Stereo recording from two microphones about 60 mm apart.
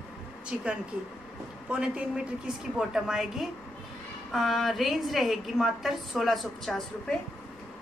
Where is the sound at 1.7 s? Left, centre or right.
Centre.